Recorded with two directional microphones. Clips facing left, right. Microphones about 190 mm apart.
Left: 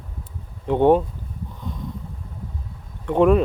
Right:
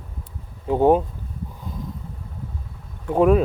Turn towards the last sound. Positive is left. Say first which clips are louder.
# even
turn(degrees=-5)  # may be behind; listen again after turning